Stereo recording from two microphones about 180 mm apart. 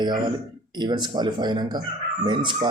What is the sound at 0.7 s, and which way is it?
Speech, 25° right (ahead or behind).